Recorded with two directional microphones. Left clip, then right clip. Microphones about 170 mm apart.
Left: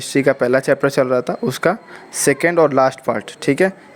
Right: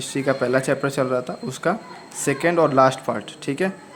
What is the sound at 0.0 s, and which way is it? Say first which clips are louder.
Speech: left 6 dB; 40° left (ahead or behind).